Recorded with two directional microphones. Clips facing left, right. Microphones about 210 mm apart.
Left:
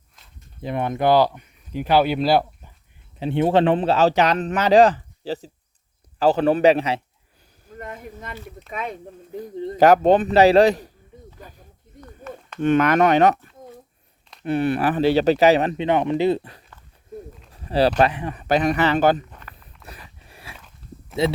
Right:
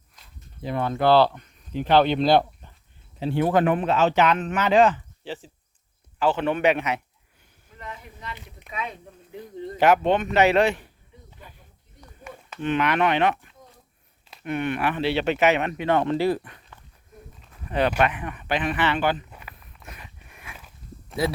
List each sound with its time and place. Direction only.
0.6 s speech: 20° left (ahead or behind)
3.2 s speech: 25° left (ahead or behind)
7.7 s speech: 50° left (ahead or behind)
9.6 s speech: 35° left (ahead or behind)
11.3 s snake: 40° left (ahead or behind)
11.9 s a sound: 10° right (ahead or behind)
12.5 s speech: 45° left (ahead or behind)
14.4 s speech: 35° left (ahead or behind)
15.8 s speech: 15° left (ahead or behind); by 19.2 s 40° left (ahead or behind)
19.3 s a sound: 10° right (ahead or behind)
19.8 s a sound: 35° left (ahead or behind)
20.6 s walk: 5° right (ahead or behind)